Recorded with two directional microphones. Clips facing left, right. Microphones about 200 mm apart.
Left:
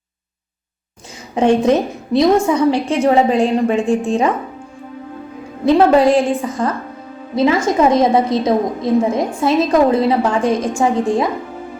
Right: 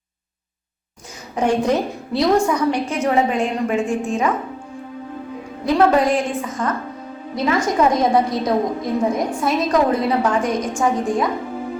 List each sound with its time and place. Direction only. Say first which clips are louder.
1.4 s a woman's voice: left 5 dB; 25° left (ahead or behind)
5.6 s a woman's voice: left 5 dB; 25° left (ahead or behind)